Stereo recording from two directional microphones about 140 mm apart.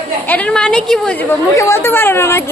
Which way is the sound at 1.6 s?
20° left (ahead or behind).